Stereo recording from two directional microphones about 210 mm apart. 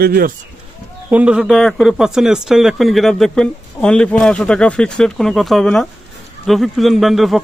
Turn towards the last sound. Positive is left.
turn(degrees=0)  # may be behind; listen again after turning